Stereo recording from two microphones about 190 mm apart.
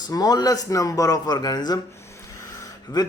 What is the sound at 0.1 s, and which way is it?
Speech, 20° left (ahead or behind).